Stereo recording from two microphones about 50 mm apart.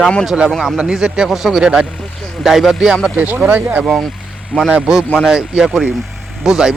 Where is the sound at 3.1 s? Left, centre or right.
Right.